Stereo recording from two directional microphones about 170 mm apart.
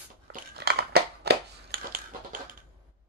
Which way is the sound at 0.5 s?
75° right (ahead or behind).